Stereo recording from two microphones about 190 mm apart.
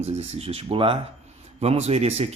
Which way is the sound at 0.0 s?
35° right (ahead or behind).